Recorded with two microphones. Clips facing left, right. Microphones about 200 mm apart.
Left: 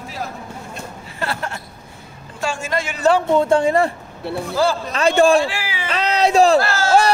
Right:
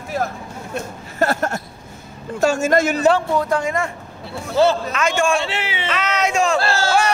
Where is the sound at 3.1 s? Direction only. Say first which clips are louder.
Left 4 dB; 25° left (ahead or behind).